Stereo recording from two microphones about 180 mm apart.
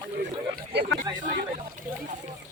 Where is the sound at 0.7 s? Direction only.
70° right (ahead or behind).